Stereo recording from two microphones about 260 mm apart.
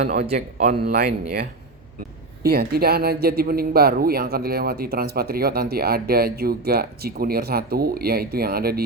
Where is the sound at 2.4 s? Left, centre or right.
Right.